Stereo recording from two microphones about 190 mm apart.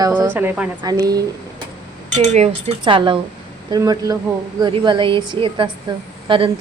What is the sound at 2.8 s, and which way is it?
A woman's voice, 25° right (ahead or behind).